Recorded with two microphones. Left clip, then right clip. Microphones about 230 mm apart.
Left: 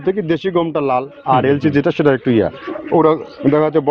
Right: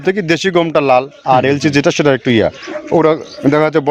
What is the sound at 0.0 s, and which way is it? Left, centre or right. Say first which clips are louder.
Speech: right 3 dB; right.